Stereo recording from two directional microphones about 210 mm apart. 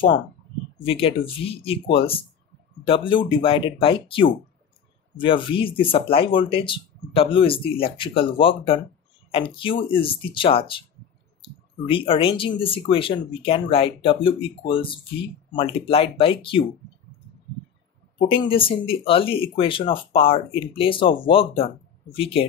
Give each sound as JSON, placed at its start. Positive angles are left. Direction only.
{"t": 0.8, "sound": "speech", "side_deg": 25}
{"t": 18.4, "sound": "speech", "side_deg": 25}